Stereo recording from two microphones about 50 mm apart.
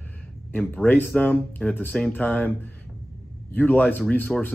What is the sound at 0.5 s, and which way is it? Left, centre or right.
Speech, left.